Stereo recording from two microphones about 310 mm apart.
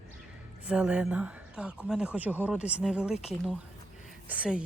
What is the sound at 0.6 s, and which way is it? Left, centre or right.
Speech, centre.